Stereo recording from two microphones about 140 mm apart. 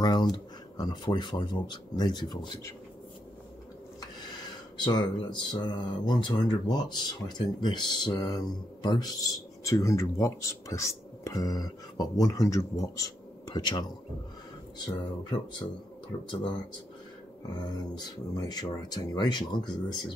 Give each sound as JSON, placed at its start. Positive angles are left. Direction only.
{"t": 0.0, "sound": "speech", "side_deg": 30}
{"t": 4.8, "sound": "speech", "side_deg": 30}
{"t": 14.9, "sound": "speech", "side_deg": 30}
{"t": 17.6, "sound": "speech", "side_deg": 30}